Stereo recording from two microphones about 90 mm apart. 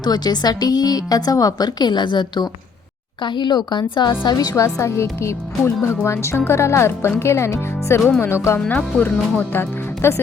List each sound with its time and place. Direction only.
0.0 s a woman's voice: 50° left (ahead or behind)
4.4 s speech: 40° left (ahead or behind)
8.5 s speech: 15° left (ahead or behind)